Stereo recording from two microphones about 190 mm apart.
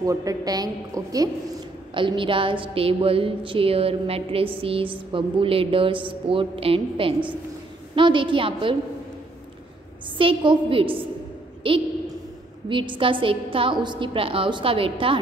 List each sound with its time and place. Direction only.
0.0 s a woman's voice: 20° right (ahead or behind)
10.1 s a woman's voice: 25° right (ahead or behind)